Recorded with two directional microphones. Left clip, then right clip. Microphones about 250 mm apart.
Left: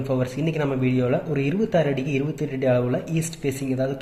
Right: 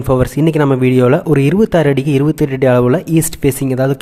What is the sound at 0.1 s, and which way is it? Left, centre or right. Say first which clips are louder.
Speech: right 13 dB; right.